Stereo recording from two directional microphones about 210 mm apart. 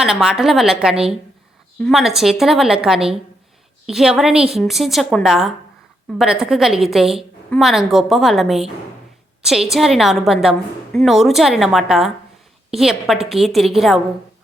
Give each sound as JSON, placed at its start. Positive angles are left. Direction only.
{"t": 0.0, "sound": "a woman's voice", "side_deg": -5}